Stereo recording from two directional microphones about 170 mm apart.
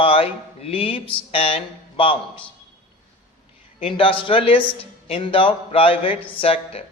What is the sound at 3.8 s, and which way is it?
A man's voice, 30° left (ahead or behind).